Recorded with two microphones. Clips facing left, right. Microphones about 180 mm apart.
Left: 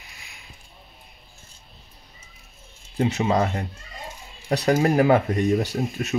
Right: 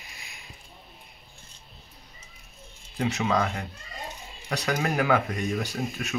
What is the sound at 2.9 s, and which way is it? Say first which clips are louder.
Speech: left 4 dB; 30° left (ahead or behind).